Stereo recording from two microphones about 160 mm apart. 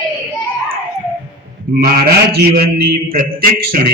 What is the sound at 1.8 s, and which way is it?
A man's voice, 70° right (ahead or behind).